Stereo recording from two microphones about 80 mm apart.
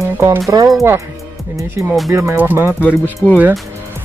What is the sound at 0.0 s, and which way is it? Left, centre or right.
Music, right.